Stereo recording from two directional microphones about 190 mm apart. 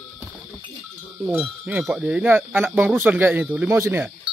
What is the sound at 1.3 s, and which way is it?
Speech, 5° right (ahead or behind).